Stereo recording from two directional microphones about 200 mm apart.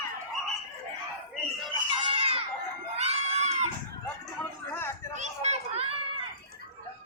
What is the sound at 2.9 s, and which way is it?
Crowd, 35° right (ahead or behind).